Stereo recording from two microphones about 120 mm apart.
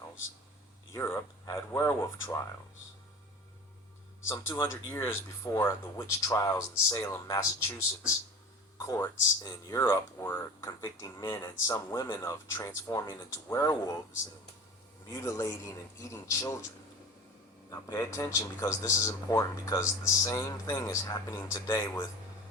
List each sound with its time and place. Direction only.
0.9 s speech: 20° left (ahead or behind)
4.3 s speech: 20° left (ahead or behind)
8.8 s speech: 25° left (ahead or behind)
11.6 s speech: 25° left (ahead or behind)
15.1 s speech: 25° left (ahead or behind)
17.7 s speech: 30° left (ahead or behind)